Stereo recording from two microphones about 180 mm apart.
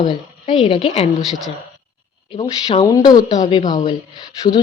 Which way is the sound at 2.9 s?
20° left (ahead or behind).